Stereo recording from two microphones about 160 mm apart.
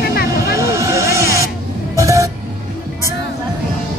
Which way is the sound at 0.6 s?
20° right (ahead or behind).